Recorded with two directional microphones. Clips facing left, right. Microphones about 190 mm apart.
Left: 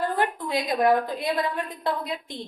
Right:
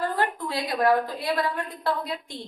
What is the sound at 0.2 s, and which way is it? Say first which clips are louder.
A woman's voice: left 2 dB; 20° left (ahead or behind).